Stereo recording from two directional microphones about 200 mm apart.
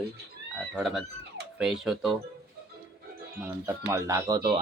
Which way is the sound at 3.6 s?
15° right (ahead or behind).